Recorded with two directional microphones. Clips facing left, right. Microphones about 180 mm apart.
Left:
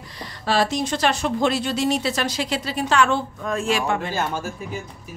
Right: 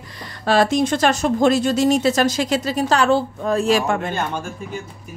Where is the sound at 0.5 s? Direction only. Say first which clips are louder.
Right 5 dB; 50° right (ahead or behind).